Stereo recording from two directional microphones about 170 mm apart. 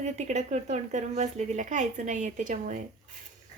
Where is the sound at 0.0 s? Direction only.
40° right (ahead or behind).